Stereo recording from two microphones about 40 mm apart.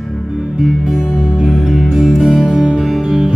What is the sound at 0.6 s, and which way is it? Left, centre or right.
Music, centre.